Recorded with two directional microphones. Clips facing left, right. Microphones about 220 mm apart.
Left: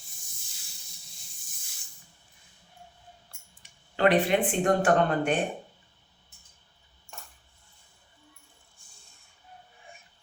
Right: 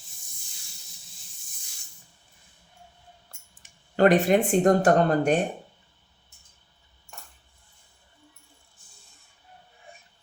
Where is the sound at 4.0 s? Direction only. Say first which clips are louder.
Right 4 dB; 45° right (ahead or behind).